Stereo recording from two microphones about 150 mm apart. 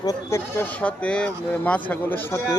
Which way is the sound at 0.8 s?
10° left (ahead or behind).